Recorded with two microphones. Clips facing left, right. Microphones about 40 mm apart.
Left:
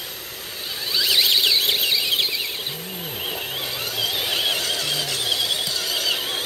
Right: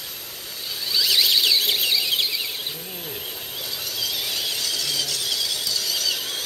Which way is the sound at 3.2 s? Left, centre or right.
Left.